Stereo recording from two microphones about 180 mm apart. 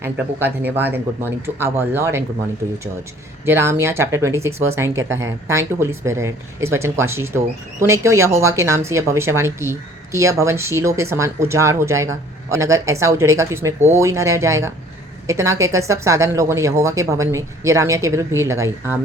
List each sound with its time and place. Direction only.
0.0 s speech: 10° right (ahead or behind)
3.4 s speech: 15° right (ahead or behind)